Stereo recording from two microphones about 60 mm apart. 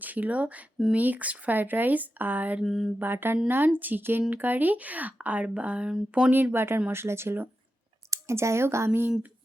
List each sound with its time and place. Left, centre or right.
0.0 s speech: right
2.6 s a sound: centre
3.0 s speech: right
6.3 s speech: right
8.1 s speech: right
8.9 s speech: right